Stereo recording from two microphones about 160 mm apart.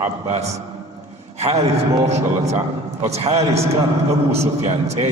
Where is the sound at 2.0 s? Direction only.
45° right (ahead or behind).